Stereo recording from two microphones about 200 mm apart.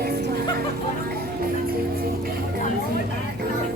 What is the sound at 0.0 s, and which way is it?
Music, 50° right (ahead or behind).